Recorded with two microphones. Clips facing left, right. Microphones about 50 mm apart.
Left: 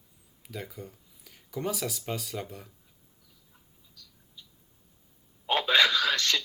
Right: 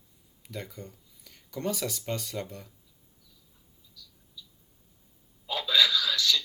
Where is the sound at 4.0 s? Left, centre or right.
Left.